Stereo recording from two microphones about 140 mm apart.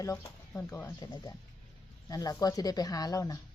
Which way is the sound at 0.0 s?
25° left (ahead or behind).